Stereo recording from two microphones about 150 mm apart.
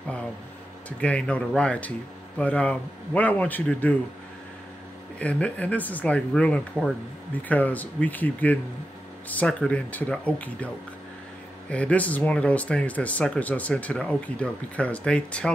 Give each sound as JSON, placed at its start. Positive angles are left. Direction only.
{"t": 0.8, "sound": "speech", "side_deg": 10}
{"t": 5.2, "sound": "speech", "side_deg": 10}
{"t": 11.7, "sound": "speech", "side_deg": 10}